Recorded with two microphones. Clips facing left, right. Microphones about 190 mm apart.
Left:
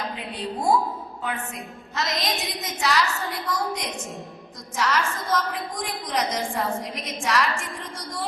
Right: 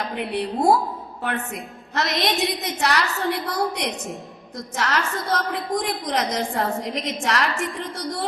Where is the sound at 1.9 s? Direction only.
65° right (ahead or behind).